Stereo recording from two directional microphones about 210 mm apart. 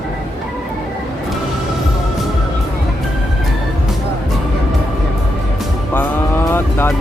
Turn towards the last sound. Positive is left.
turn(degrees=10)  # may be behind; listen again after turning